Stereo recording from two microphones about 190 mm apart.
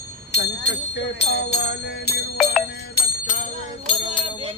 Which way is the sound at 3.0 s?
45° left (ahead or behind).